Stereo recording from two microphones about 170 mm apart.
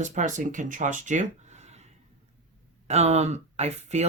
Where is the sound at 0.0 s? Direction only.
45° right (ahead or behind).